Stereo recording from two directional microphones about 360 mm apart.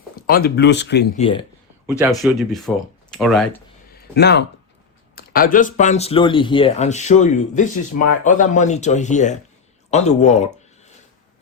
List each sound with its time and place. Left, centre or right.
0.2 s speech: left
2.0 s speech: centre
3.9 s speech: left